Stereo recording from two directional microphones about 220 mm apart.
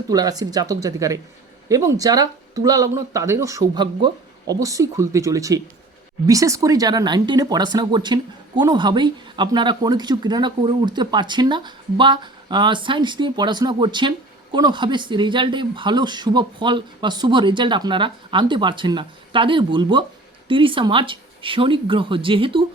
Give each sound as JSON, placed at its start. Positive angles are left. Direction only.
{"t": 0.1, "sound": "speech", "side_deg": -15}